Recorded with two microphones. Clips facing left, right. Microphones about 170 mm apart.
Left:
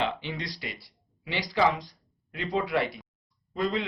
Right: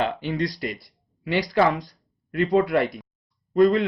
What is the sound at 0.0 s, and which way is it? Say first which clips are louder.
Speech: right 6 dB; 40° right (ahead or behind).